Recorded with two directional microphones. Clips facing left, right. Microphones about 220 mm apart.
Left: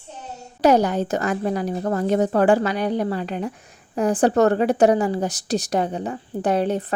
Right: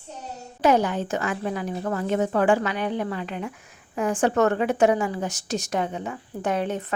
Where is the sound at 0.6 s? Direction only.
40° left (ahead or behind).